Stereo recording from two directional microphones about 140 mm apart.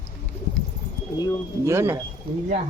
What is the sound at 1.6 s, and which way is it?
Speech, 20° right (ahead or behind).